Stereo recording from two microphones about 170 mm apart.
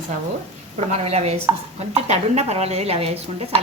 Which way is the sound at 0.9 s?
40° right (ahead or behind).